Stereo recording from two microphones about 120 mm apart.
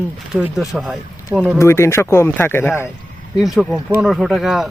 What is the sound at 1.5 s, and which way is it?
Speech, 20° left (ahead or behind).